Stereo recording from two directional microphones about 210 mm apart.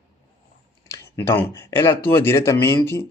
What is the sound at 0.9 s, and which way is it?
Speech, 10° left (ahead or behind).